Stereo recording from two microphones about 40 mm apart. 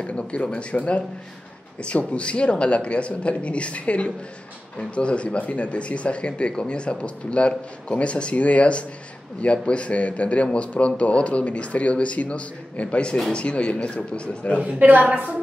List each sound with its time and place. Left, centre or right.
0.0 s a man's voice: left
14.8 s a woman's voice: right